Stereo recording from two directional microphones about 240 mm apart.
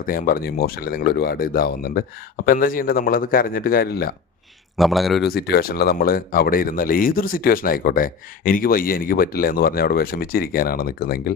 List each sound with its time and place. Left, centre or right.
0.0 s speech: left
4.8 s speech: centre
5.3 s speech: left